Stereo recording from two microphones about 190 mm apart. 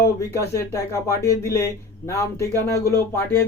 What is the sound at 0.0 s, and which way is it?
Speech, 15° left (ahead or behind).